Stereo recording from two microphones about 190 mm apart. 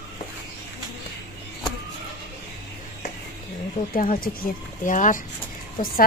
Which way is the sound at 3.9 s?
45° left (ahead or behind).